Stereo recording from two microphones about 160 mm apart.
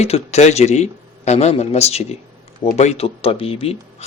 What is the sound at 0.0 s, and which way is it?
Speech, 45° left (ahead or behind).